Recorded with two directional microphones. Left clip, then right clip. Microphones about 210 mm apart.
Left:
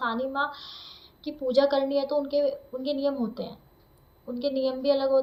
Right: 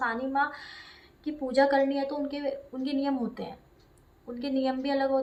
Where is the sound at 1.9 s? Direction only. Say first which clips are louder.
Left 4 dB; 15° right (ahead or behind).